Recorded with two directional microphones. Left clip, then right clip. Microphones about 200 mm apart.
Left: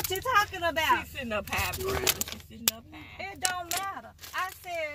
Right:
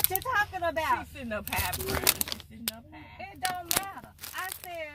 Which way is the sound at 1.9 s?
50° right (ahead or behind).